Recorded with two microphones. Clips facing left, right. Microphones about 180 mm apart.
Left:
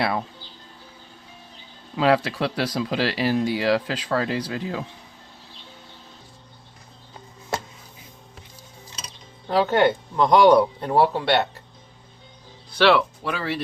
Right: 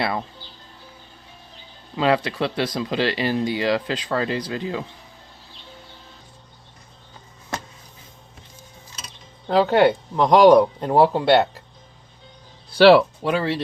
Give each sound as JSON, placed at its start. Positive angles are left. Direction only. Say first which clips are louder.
{"t": 0.0, "sound": "speech", "louder": "even", "side_deg": 5}
{"t": 2.0, "sound": "speech", "louder": "even", "side_deg": 5}
{"t": 9.5, "sound": "speech", "louder": "right 3 dB", "side_deg": -15}
{"t": 12.7, "sound": "speech", "louder": "right 6 dB", "side_deg": -35}